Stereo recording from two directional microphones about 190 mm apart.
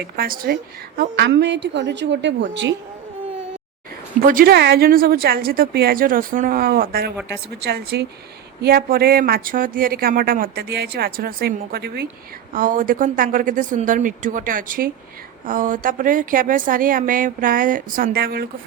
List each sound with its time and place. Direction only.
0.0 s speech: 50° right (ahead or behind)
1.1 s a woman's voice: 70° right (ahead or behind)
4.2 s speech: 50° right (ahead or behind)